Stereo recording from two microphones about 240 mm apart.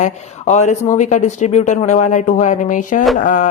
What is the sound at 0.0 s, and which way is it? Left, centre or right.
Speech, left.